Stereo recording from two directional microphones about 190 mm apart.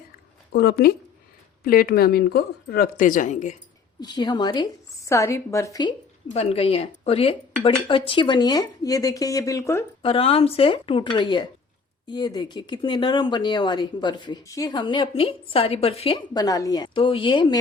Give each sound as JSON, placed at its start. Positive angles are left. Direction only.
{"t": 0.5, "sound": "speech", "side_deg": 55}
{"t": 4.0, "sound": "speech", "side_deg": 25}
{"t": 6.3, "sound": "speech", "side_deg": 30}
{"t": 10.0, "sound": "speech", "side_deg": 30}